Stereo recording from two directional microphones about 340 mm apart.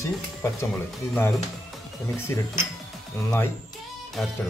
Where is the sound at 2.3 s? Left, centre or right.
Centre.